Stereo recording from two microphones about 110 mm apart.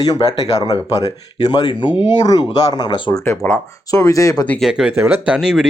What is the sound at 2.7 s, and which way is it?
Speech, 40° left (ahead or behind).